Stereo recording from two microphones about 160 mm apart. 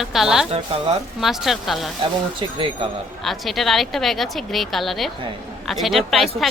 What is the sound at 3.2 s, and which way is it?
Speech, centre (ahead or behind).